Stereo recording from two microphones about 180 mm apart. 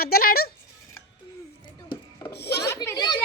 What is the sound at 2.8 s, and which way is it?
Children playing, 20° left (ahead or behind).